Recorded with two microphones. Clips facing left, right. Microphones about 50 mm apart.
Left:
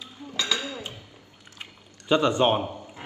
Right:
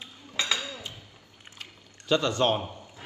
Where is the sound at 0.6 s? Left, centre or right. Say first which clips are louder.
Left 3 dB; left.